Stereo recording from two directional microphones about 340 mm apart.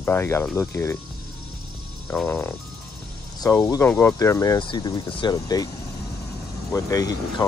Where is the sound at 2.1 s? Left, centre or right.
Centre.